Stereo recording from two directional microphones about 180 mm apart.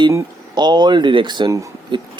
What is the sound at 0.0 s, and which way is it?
Speech, 20° right (ahead or behind).